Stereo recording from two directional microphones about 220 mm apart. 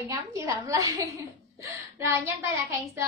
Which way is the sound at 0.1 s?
15° right (ahead or behind).